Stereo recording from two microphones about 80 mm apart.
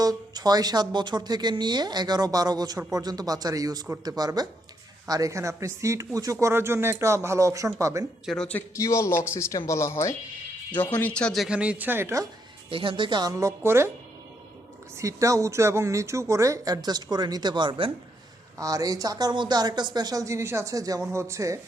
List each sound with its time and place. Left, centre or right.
0.0 s a woman's voice: right
8.3 s speech: centre
8.7 s speech: left
10.7 s speech: left
11.5 s speech: centre
11.9 s speech: right
12.7 s speech: right
13.2 s speech: right
14.9 s speech: right
18.5 s speech: right
20.7 s speech: right
21.0 s speech: right